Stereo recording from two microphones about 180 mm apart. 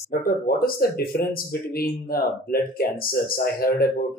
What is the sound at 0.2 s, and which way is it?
Speech, 55° left (ahead or behind).